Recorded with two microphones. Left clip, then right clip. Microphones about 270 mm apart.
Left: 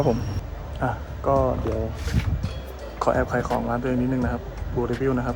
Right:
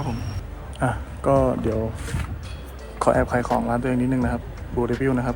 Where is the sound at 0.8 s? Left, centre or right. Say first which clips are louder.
Right 2 dB; right.